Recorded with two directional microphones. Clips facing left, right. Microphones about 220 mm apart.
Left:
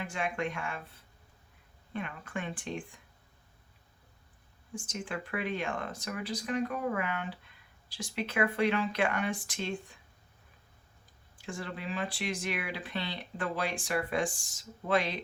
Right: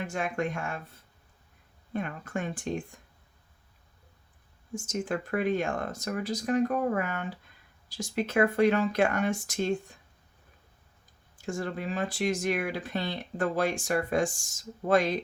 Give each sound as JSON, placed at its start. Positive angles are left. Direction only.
{"t": 0.0, "sound": "speech", "side_deg": -45}
{"t": 1.9, "sound": "speech", "side_deg": -45}
{"t": 4.7, "sound": "speech", "side_deg": -45}
{"t": 11.3, "sound": "speech", "side_deg": -45}